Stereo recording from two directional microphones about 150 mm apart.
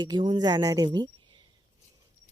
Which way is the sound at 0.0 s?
30° right (ahead or behind).